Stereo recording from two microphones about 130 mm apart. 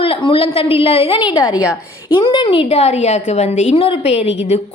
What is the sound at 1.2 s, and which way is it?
A woman's voice, 35° left (ahead or behind).